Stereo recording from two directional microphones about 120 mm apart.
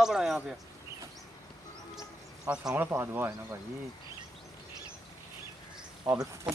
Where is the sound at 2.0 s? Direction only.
5° right (ahead or behind).